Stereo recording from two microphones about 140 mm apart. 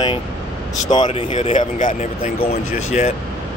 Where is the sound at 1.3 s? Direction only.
60° left (ahead or behind).